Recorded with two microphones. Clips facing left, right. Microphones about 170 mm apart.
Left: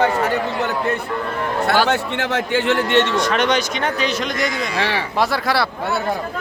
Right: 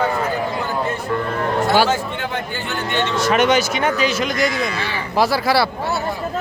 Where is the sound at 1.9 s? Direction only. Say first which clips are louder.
Left 2 dB; 80° left.